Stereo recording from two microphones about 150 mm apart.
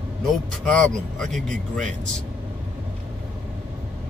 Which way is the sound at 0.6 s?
5° left (ahead or behind).